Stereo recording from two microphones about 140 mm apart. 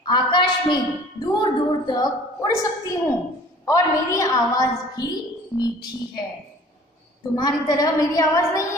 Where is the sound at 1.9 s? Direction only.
30° left (ahead or behind).